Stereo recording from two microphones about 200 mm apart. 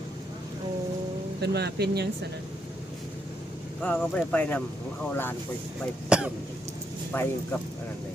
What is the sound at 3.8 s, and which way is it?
Speech, 5° left (ahead or behind).